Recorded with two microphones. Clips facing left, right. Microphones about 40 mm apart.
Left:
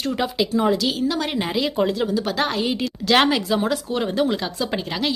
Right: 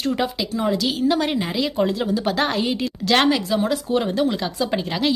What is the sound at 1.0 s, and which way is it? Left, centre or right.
Speech, centre.